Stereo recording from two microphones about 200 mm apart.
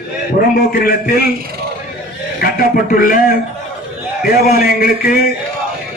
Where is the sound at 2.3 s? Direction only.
45° left (ahead or behind).